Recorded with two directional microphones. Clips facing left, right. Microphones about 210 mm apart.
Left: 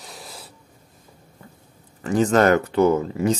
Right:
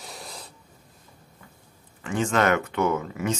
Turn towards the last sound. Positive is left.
turn(degrees=30)  # may be behind; listen again after turning